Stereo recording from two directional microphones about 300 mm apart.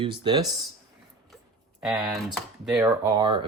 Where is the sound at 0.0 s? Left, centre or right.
Centre.